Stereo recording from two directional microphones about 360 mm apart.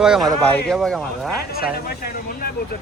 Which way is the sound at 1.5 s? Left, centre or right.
Left.